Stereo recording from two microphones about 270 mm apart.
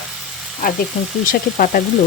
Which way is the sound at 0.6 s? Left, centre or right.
Left.